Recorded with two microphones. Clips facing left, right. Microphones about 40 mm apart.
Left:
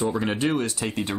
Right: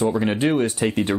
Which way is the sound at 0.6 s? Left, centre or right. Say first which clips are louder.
Right 6 dB; right.